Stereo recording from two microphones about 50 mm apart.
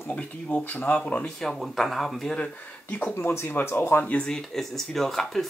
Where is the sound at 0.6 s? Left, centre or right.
Left.